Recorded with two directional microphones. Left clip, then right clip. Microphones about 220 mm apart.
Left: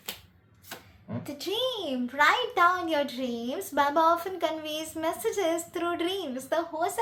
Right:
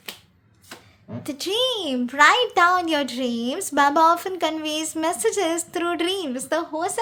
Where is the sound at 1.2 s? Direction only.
55° right (ahead or behind).